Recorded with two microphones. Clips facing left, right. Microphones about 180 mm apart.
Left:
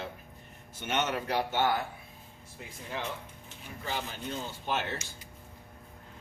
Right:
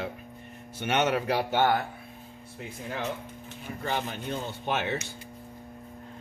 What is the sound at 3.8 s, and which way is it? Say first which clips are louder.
Speech: right 5 dB; 60° right (ahead or behind).